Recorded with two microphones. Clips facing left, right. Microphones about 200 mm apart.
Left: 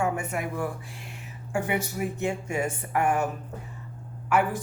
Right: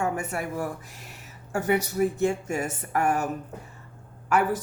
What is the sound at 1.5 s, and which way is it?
Speech, 40° right (ahead or behind).